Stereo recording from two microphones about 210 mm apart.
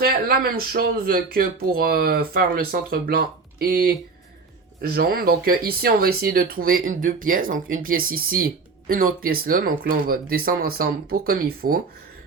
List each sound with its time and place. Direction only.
0.0 s speech: 45° right (ahead or behind)